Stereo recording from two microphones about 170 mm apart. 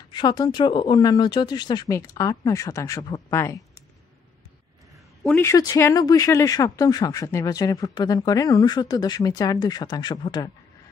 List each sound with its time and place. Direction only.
0.1 s speech: 25° left (ahead or behind)
5.2 s speech: 10° left (ahead or behind)